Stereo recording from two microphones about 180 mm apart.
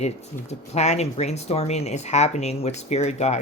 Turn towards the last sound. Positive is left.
turn(degrees=40)  # may be behind; listen again after turning